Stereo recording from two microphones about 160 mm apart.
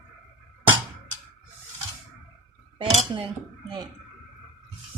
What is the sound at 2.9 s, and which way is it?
Speech, 35° right (ahead or behind).